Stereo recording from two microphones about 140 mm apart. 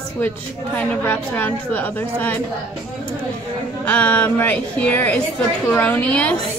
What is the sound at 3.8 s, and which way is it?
Speech, 10° left (ahead or behind).